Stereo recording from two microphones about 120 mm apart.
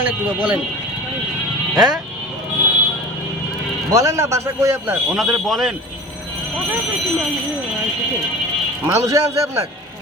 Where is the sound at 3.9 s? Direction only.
25° right (ahead or behind).